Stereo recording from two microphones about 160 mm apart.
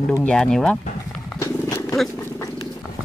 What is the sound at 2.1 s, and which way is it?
Cat, 20° left (ahead or behind).